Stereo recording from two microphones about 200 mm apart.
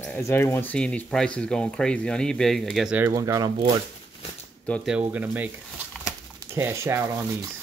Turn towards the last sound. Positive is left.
turn(degrees=-10)  # may be behind; listen again after turning